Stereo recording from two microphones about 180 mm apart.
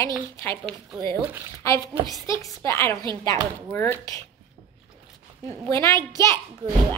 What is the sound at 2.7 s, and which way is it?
A woman's voice, 15° left (ahead or behind).